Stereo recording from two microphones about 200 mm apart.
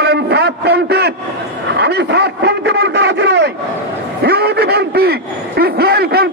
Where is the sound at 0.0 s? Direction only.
55° right (ahead or behind).